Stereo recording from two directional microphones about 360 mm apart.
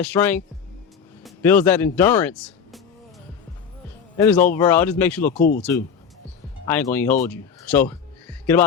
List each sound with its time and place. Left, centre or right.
0.0 s speech: centre
4.2 s speech: centre
5.3 s speech: left
6.7 s speech: centre